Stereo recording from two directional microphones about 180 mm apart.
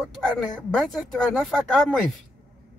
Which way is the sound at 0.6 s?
5° left (ahead or behind).